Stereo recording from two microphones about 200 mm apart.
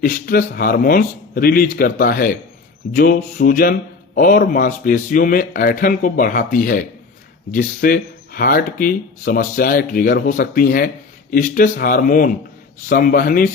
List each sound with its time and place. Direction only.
0.0 s speech: 45° left (ahead or behind)